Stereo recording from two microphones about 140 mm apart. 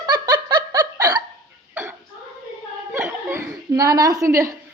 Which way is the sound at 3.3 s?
20° right (ahead or behind).